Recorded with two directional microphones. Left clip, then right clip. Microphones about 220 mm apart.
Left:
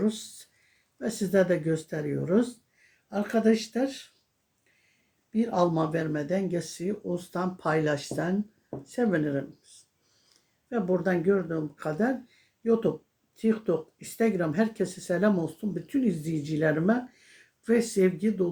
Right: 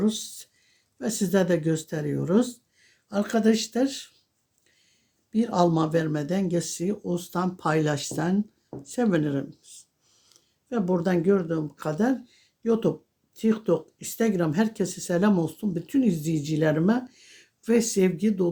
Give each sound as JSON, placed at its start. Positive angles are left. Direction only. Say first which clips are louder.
{"t": 0.0, "sound": "speech", "louder": "right 2 dB", "side_deg": -40}
{"t": 5.3, "sound": "speech", "louder": "right 3 dB", "side_deg": -40}
{"t": 10.7, "sound": "speech", "louder": "right 1 dB", "side_deg": -40}